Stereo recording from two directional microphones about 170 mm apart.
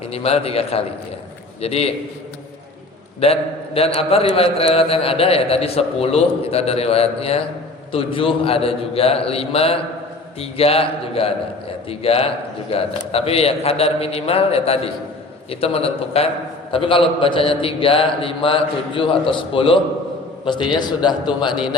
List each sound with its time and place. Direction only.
0.1 s a man's voice: 35° left (ahead or behind)
3.8 s a man's voice: 35° left (ahead or behind)